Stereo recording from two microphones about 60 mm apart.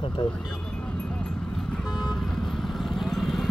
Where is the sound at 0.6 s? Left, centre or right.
Centre.